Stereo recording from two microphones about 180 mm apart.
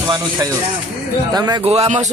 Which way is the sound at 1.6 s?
35° right (ahead or behind).